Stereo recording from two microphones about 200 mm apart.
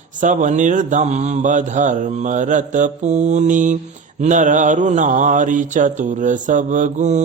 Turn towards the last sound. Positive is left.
turn(degrees=-35)  # may be behind; listen again after turning